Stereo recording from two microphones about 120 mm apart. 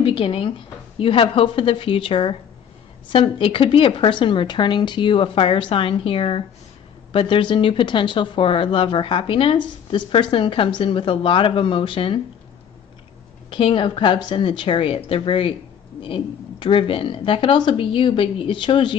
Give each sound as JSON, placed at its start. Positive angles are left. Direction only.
{"t": 0.0, "sound": "speech", "side_deg": 50}
{"t": 13.5, "sound": "speech", "side_deg": 45}